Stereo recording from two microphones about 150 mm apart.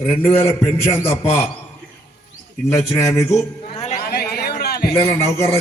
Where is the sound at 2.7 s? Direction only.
20° left (ahead or behind).